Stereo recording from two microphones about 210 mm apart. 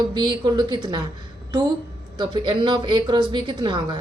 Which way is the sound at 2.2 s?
25° right (ahead or behind).